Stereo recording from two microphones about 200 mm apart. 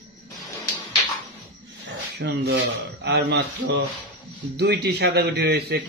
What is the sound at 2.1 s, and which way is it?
A man's voice, 55° right (ahead or behind).